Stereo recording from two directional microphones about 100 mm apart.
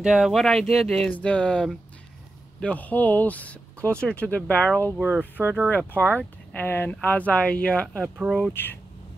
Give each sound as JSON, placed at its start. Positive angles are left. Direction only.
{"t": 0.0, "sound": "speech", "side_deg": -5}
{"t": 8.6, "sound": "speech", "side_deg": 20}